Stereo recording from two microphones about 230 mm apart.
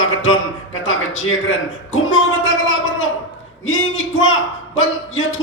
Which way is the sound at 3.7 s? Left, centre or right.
Left.